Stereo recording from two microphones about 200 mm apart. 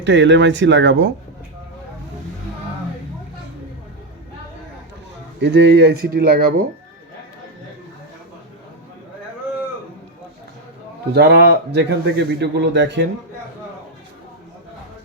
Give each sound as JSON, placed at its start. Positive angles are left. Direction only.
{"t": 0.0, "sound": "a man's voice", "side_deg": -65}
{"t": 5.4, "sound": "speech", "side_deg": -60}
{"t": 11.1, "sound": "a man's voice", "side_deg": -55}